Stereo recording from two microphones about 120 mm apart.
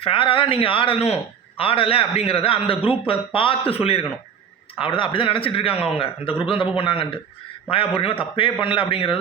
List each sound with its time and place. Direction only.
0.0 s a man's voice: 50° left (ahead or behind)
4.8 s a man's voice: 45° left (ahead or behind)